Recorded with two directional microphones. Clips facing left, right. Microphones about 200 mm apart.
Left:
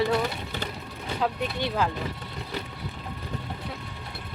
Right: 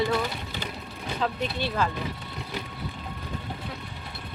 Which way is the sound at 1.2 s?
15° left (ahead or behind).